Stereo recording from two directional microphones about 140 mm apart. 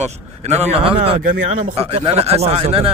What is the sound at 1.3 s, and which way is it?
Speech, 75° right (ahead or behind).